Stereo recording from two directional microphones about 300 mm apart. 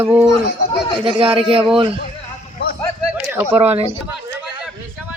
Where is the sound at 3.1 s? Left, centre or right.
Centre.